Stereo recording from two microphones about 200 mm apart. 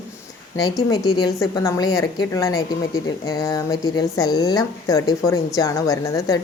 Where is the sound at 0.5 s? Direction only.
20° left (ahead or behind).